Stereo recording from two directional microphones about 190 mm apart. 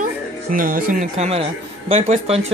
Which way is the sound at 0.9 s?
35° right (ahead or behind).